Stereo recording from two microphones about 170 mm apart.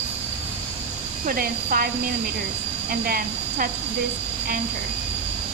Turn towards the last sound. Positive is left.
turn(degrees=-55)  # may be behind; listen again after turning